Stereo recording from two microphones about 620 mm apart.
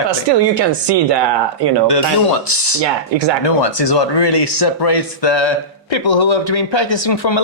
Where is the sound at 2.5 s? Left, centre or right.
Left.